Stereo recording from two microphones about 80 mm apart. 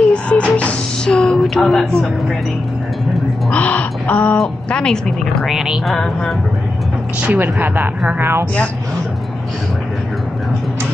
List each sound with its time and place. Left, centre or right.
0.0 s music: centre
3.4 s speech: centre
4.6 s a woman's voice: centre
5.5 s speech: centre
7.3 s speech: right